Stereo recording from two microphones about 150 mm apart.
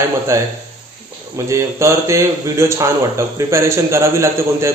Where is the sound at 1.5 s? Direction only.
20° right (ahead or behind).